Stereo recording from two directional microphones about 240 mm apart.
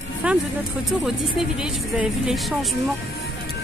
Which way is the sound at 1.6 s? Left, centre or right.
Centre.